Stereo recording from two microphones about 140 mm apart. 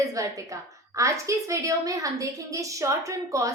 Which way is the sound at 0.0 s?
25° right (ahead or behind).